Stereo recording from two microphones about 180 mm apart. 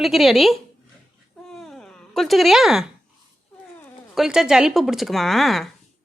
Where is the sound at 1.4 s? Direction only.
Centre (ahead or behind).